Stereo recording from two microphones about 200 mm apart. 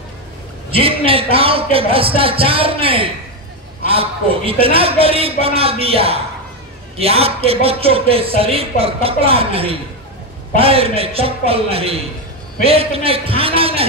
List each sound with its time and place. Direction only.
0.7 s a man's voice: 25° right (ahead or behind)